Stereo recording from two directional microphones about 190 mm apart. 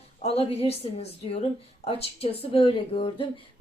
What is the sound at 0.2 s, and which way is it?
A woman's voice, 35° left (ahead or behind).